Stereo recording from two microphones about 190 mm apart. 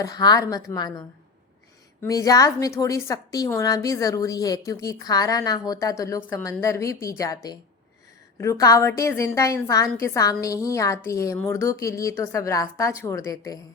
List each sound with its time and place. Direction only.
0.0 s a woman's voice: 20° left (ahead or behind)